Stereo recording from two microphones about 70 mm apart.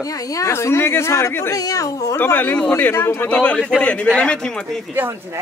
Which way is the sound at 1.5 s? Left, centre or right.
Left.